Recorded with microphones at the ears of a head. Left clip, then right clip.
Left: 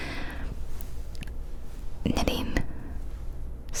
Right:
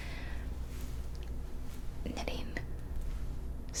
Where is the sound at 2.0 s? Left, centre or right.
Left.